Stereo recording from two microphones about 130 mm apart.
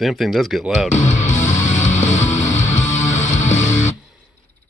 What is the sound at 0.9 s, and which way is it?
Music, 70° left (ahead or behind).